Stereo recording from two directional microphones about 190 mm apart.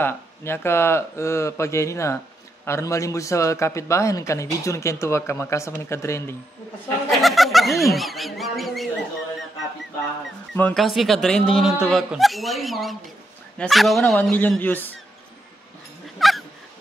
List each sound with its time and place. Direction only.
0.0 s a man's voice: 15° left (ahead or behind)
7.1 s speech: centre (ahead or behind)
10.5 s a man's voice: 5° left (ahead or behind)
16.2 s dog: centre (ahead or behind)